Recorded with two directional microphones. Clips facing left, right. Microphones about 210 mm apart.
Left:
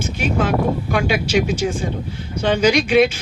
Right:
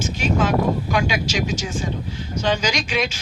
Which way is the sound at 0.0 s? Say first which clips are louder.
Left 1 dB; 55° left (ahead or behind).